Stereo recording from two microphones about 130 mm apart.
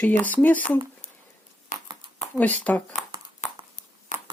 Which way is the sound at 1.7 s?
70° left (ahead or behind).